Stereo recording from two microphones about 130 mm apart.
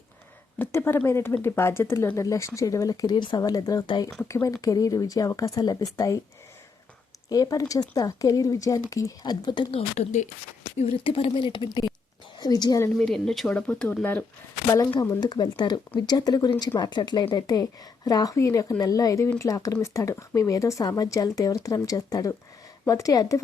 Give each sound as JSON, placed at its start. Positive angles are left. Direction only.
{"t": 0.6, "sound": "speech", "side_deg": 15}
{"t": 4.2, "sound": "speech", "side_deg": 20}
{"t": 7.3, "sound": "speech", "side_deg": 30}
{"t": 10.0, "sound": "speech", "side_deg": 60}
{"t": 10.8, "sound": "speech", "side_deg": 45}
{"t": 13.0, "sound": "speech", "side_deg": 5}
{"t": 15.0, "sound": "speech", "side_deg": 25}